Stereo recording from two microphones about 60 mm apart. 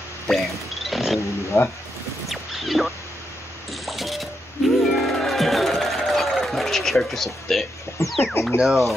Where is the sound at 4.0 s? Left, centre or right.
Centre.